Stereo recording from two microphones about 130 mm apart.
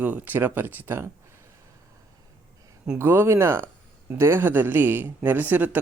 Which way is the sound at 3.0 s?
20° right (ahead or behind).